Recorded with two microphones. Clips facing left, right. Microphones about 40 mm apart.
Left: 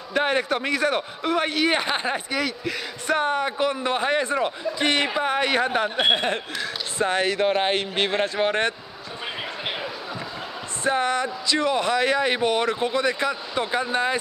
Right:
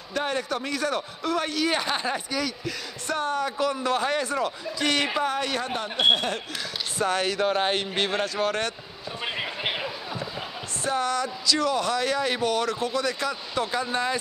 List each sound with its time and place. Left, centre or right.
0.1 s speech: left
10.8 s speech: left